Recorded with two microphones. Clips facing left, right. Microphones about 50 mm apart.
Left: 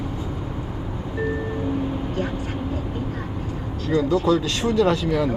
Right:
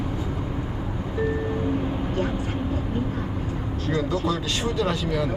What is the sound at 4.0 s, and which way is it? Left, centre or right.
Speech, centre.